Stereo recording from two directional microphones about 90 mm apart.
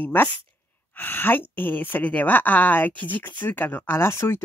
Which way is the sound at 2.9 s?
65° right (ahead or behind).